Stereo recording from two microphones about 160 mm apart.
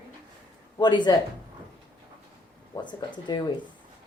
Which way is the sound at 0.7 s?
25° left (ahead or behind).